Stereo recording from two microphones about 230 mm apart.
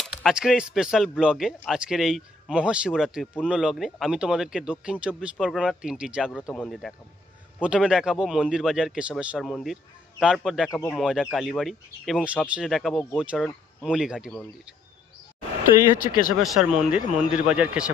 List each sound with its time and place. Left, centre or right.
0.0 s speech: centre
16.0 s speech: left
16.3 s speech: centre